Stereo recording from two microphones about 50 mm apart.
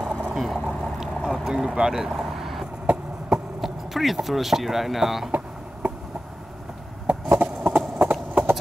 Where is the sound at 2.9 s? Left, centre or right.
Centre.